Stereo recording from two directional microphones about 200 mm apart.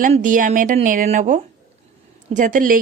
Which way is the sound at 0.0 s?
40° right (ahead or behind).